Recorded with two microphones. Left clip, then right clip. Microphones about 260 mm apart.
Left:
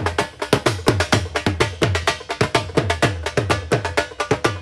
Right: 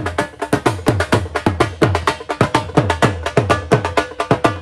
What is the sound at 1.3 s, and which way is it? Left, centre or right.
Music, centre.